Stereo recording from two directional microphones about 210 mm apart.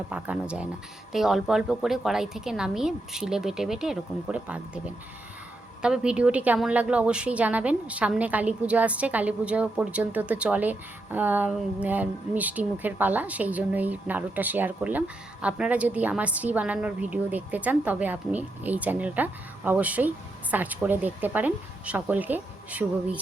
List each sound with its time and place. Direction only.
0.1 s a woman's voice: 5° right (ahead or behind)
5.8 s a woman's voice: 5° right (ahead or behind)